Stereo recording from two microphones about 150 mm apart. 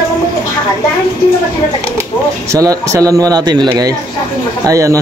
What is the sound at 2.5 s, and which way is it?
A man's voice, 20° right (ahead or behind).